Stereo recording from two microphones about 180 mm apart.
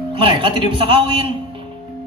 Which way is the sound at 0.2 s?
30° right (ahead or behind).